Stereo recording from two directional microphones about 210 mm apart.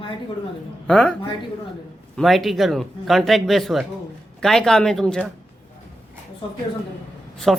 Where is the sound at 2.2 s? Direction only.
Centre (ahead or behind).